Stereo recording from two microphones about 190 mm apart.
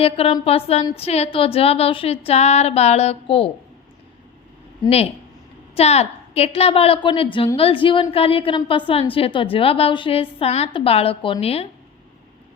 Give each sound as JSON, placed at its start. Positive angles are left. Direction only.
{"t": 0.0, "sound": "speech", "side_deg": 30}
{"t": 5.7, "sound": "a woman's voice", "side_deg": 35}